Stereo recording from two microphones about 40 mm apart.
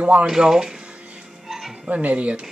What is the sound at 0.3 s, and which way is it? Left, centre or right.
Speech, centre.